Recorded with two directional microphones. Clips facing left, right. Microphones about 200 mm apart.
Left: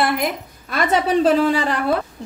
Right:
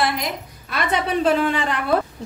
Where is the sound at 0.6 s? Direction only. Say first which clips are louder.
Left 4 dB; 45° left (ahead or behind).